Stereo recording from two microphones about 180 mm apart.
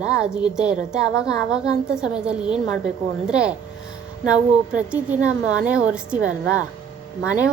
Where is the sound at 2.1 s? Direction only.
5° right (ahead or behind).